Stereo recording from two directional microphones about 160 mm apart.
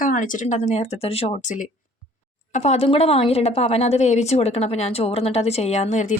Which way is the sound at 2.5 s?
40° left (ahead or behind).